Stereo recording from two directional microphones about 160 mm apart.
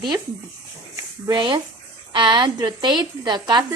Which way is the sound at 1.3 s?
25° right (ahead or behind).